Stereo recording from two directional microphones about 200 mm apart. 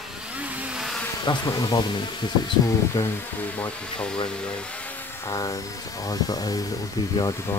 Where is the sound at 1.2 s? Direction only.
20° left (ahead or behind).